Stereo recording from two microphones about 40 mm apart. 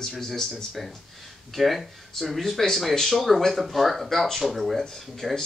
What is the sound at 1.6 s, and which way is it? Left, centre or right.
Speech, centre.